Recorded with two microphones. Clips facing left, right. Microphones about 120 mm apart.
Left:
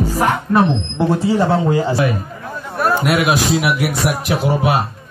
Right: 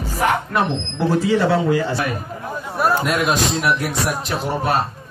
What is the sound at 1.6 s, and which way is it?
Speech, 30° left (ahead or behind).